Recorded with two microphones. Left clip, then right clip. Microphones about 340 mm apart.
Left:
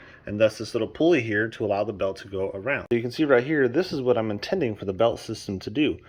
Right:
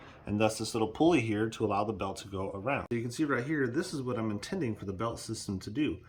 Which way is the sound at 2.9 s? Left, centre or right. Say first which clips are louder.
Left 11 dB; centre.